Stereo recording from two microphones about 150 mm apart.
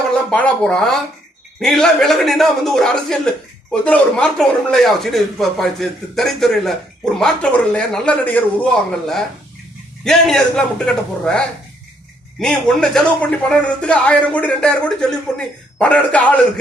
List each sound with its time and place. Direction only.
0.3 s a man's voice: 5° left (ahead or behind)